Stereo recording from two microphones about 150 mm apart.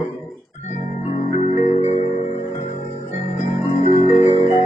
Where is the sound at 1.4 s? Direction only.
55° left (ahead or behind).